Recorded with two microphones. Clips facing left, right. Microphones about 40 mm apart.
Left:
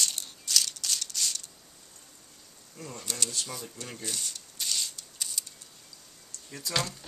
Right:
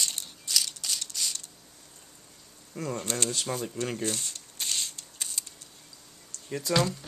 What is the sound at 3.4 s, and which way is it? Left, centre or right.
Shuffling cards, right.